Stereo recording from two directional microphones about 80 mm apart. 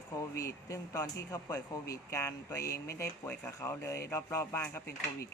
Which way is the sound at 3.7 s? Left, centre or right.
Left.